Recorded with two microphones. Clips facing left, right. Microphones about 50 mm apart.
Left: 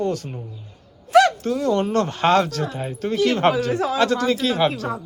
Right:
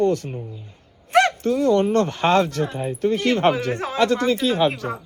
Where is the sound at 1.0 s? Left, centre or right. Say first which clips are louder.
Left 2 dB; right.